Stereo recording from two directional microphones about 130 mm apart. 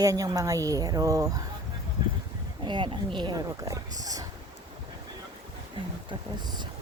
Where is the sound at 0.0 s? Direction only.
25° right (ahead or behind).